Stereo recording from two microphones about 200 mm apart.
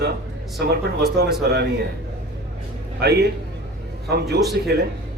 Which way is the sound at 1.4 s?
55° right (ahead or behind).